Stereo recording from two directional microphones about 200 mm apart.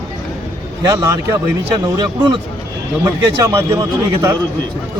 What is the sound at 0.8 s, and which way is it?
Speech, 15° right (ahead or behind).